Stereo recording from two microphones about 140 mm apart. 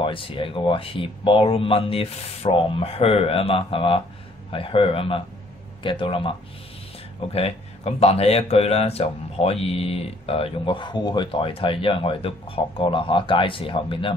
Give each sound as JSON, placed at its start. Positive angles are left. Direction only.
{"t": 0.0, "sound": "speech", "side_deg": 40}
{"t": 7.3, "sound": "speech", "side_deg": 45}